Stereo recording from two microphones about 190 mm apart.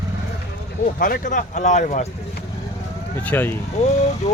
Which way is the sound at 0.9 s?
45° left (ahead or behind).